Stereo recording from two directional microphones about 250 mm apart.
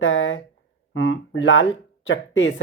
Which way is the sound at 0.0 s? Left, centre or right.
Left.